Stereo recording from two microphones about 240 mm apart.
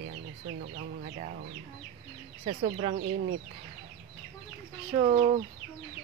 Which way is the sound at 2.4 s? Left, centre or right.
Right.